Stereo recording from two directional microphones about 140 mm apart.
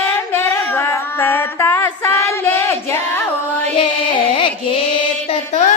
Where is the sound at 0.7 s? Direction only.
20° left (ahead or behind).